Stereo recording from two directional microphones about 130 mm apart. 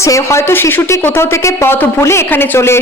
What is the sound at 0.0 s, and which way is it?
A woman's voice, 20° left (ahead or behind).